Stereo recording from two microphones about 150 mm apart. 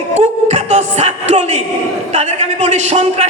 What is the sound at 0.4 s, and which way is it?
Music, 50° right (ahead or behind).